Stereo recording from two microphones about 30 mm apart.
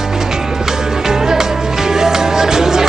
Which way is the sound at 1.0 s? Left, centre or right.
Centre.